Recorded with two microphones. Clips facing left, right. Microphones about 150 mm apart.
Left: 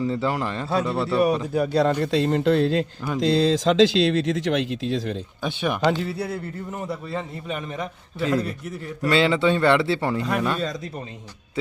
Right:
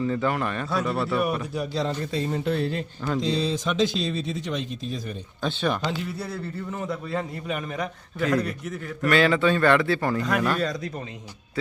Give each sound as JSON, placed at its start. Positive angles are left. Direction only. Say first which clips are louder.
{"t": 0.0, "sound": "a man's voice", "louder": "left 1 dB", "side_deg": 25}
{"t": 1.5, "sound": "a man's voice", "louder": "left 7 dB", "side_deg": 65}
{"t": 5.4, "sound": "speech", "louder": "right 1 dB", "side_deg": 15}
{"t": 5.8, "sound": "speech", "louder": "left 7 dB", "side_deg": 50}
{"t": 6.7, "sound": "a man's voice", "louder": "right 1 dB", "side_deg": 10}
{"t": 8.2, "sound": "a man's voice", "louder": "left 1 dB", "side_deg": 25}
{"t": 10.3, "sound": "a man's voice", "louder": "even", "side_deg": 0}